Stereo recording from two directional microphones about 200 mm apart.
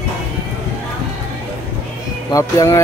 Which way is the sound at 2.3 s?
15° left (ahead or behind).